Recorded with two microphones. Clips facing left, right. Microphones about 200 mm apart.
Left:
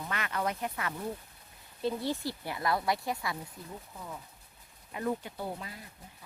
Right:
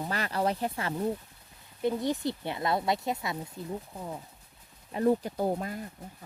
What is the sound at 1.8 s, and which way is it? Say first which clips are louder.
Speech: right 4 dB; 15° right (ahead or behind).